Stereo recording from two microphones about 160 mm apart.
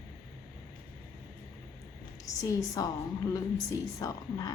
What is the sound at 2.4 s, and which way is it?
A woman's voice, 20° left (ahead or behind).